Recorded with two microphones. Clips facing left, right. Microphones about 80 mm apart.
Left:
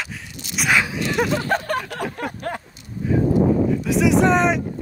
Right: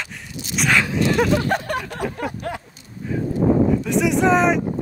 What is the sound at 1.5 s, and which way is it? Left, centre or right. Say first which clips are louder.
Speech: even; left.